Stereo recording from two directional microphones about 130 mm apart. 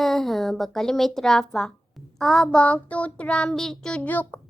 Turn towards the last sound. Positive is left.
turn(degrees=15)  # may be behind; listen again after turning